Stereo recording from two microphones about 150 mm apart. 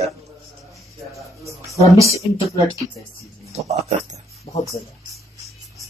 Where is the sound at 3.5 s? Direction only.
45° right (ahead or behind).